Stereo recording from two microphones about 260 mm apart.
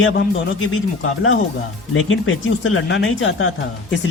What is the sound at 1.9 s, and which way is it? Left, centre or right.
Speech, left.